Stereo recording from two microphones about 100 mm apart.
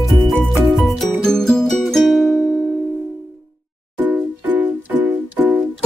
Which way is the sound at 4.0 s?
15° right (ahead or behind).